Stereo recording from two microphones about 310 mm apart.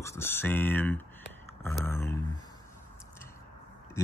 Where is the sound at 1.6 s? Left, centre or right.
Centre.